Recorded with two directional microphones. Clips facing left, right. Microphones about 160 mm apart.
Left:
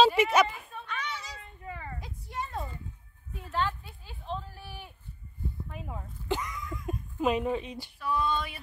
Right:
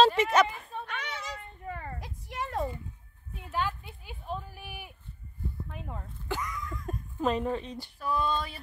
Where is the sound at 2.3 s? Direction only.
90° right.